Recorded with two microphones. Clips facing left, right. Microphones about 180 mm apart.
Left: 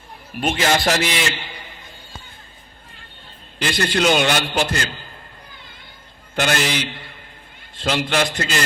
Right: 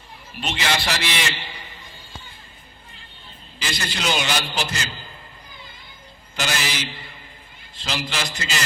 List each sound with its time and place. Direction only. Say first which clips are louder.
0.3 s music: left 6 dB; 50° left (ahead or behind)
3.6 s a man's voice: left 9 dB; 60° left (ahead or behind)
6.3 s a man's voice: left 6 dB; 60° left (ahead or behind)